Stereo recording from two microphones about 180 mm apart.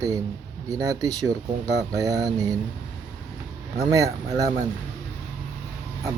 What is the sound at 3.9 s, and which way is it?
Speech, 20° right (ahead or behind).